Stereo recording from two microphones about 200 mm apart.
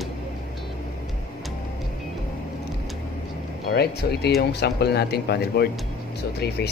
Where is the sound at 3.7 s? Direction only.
55° left (ahead or behind).